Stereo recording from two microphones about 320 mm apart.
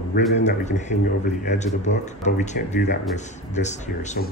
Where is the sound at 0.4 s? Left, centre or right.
Left.